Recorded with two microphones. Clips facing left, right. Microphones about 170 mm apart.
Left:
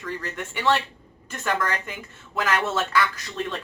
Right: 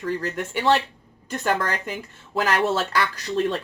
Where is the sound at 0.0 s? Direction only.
35° right (ahead or behind).